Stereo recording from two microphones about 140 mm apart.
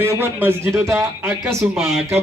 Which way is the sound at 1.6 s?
Centre (ahead or behind).